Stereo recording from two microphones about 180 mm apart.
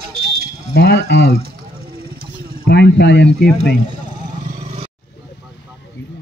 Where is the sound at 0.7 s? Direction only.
75° left (ahead or behind).